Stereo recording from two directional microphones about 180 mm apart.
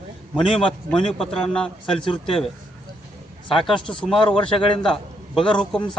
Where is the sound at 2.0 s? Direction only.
30° left (ahead or behind).